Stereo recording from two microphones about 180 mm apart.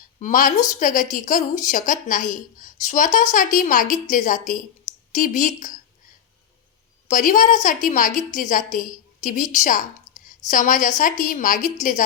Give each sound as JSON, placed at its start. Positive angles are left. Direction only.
{"t": 0.2, "sound": "a woman's voice", "side_deg": 45}
{"t": 7.1, "sound": "a woman's voice", "side_deg": 45}